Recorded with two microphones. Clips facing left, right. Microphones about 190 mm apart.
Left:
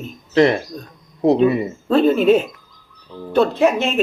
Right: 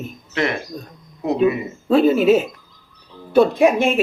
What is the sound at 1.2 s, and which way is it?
Speech, 35° left (ahead or behind).